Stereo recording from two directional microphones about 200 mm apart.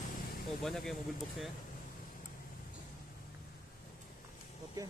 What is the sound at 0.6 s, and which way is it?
Speech, centre (ahead or behind).